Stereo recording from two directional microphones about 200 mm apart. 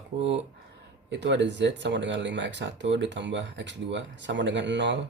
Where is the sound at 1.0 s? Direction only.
60° right (ahead or behind).